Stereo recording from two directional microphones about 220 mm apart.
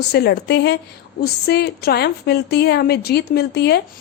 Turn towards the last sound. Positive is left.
turn(degrees=50)  # may be behind; listen again after turning